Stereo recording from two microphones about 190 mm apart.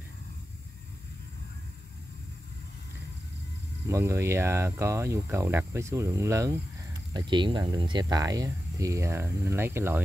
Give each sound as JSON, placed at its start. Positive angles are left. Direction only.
{"t": 3.8, "sound": "speech", "side_deg": -15}